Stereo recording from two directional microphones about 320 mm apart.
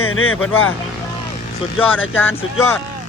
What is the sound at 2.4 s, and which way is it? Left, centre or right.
Speech, centre.